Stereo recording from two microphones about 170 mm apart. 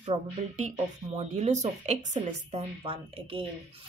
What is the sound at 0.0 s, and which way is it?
Speech, 40° right (ahead or behind).